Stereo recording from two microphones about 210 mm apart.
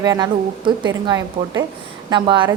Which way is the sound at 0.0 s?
20° right (ahead or behind).